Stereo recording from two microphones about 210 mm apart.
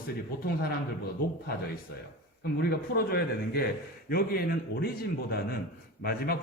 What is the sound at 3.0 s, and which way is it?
A man's voice, 45° left (ahead or behind).